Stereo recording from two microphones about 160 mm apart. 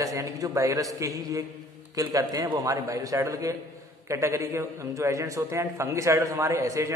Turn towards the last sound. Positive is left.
turn(degrees=-20)  # may be behind; listen again after turning